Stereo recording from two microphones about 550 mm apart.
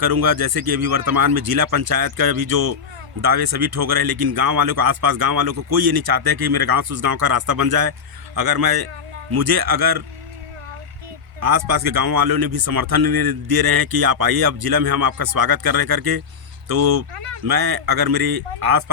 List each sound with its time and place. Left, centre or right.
0.0 s speech: right
11.3 s speech: right